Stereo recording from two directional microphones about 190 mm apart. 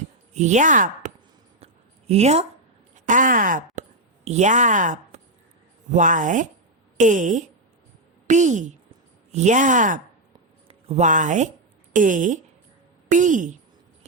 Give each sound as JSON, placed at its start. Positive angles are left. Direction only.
{"t": 0.3, "sound": "chopping", "side_deg": -40}
{"t": 1.6, "sound": "a sound", "side_deg": -35}
{"t": 2.9, "sound": "a woman's voice", "side_deg": -45}